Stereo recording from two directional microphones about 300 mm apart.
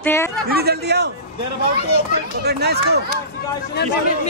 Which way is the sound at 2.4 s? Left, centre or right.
Right.